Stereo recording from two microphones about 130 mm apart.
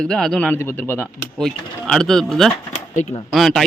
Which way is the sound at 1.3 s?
5° left (ahead or behind).